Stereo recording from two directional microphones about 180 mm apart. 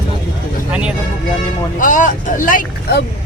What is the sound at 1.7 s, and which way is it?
Speech, 45° left (ahead or behind).